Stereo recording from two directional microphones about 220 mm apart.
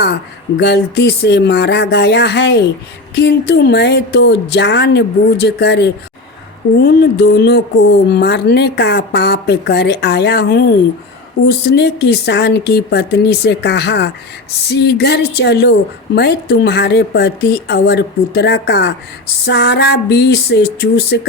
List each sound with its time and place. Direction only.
0.0 s a woman's voice: 50° left (ahead or behind)